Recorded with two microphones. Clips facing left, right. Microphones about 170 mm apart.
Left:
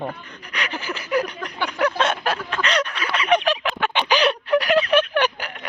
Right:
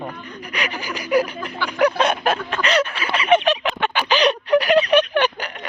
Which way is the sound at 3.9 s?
10° left (ahead or behind).